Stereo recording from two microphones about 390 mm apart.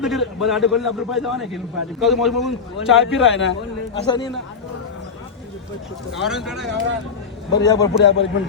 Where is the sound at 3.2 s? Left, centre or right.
Left.